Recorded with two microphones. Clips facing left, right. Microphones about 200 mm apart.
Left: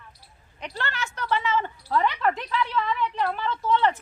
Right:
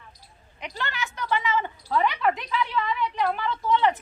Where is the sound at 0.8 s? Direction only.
15° right (ahead or behind).